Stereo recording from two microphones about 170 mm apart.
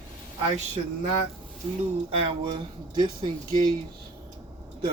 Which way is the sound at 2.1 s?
30° right (ahead or behind).